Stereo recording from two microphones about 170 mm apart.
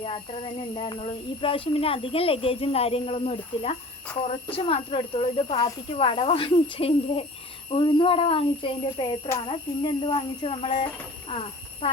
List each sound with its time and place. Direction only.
0.0 s speech: 30° left (ahead or behind)